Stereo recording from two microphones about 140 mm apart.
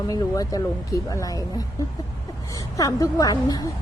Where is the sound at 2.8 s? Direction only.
25° left (ahead or behind).